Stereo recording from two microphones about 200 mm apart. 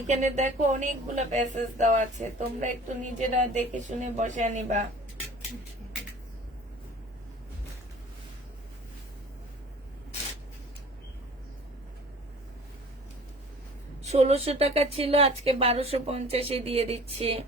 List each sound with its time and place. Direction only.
0.1 s a woman's voice: 35° right (ahead or behind)
14.0 s a woman's voice: 35° right (ahead or behind)